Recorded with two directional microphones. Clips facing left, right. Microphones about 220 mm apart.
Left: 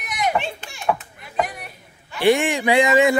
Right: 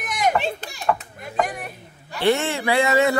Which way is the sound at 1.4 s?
45° right (ahead or behind).